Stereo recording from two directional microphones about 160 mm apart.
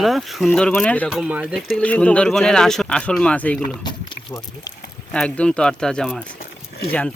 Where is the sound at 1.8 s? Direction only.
10° left (ahead or behind).